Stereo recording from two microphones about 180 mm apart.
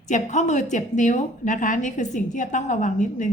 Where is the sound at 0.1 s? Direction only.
40° left (ahead or behind).